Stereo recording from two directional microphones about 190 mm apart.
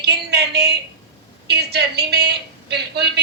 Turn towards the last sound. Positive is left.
turn(degrees=-60)  # may be behind; listen again after turning